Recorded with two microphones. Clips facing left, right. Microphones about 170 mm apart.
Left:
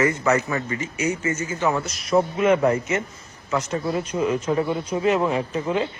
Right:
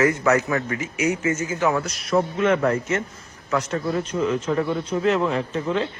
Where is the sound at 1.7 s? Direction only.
Centre (ahead or behind).